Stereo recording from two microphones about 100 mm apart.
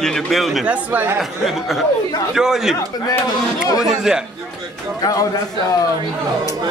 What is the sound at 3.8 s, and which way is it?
Speech, 5° right (ahead or behind).